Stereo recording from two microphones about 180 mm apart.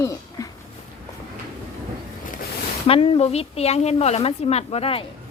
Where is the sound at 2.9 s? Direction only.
30° left (ahead or behind).